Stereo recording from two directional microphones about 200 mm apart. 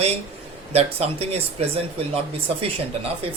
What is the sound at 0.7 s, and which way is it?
Speech, 30° right (ahead or behind).